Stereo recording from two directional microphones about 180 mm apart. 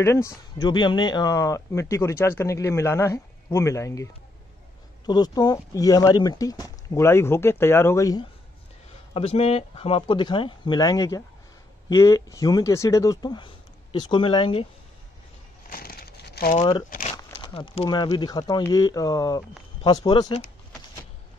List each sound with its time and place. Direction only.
0.0 s speech: 15° left (ahead or behind)
9.1 s speech: 35° left (ahead or behind)
15.7 s crumpling: 55° left (ahead or behind)
16.9 s speech: 40° left (ahead or behind)
17.2 s speech: 25° left (ahead or behind)